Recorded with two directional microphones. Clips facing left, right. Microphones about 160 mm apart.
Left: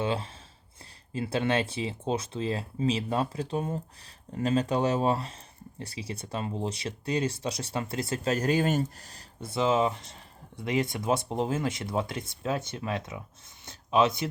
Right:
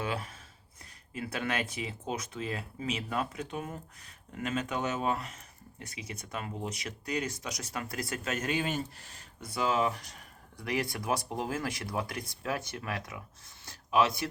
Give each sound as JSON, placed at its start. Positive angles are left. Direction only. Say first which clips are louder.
{"t": 0.0, "sound": "speech", "louder": "left 5 dB", "side_deg": 25}
{"t": 9.5, "sound": "speech", "louder": "left 4 dB", "side_deg": 25}